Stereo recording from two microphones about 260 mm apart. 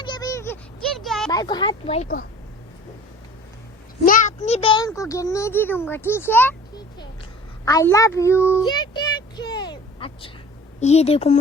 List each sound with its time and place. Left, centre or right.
0.0 s a sound: centre
1.3 s speech: centre
4.0 s a woman's voice: left